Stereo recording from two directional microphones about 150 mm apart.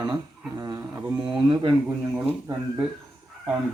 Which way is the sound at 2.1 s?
20° right (ahead or behind).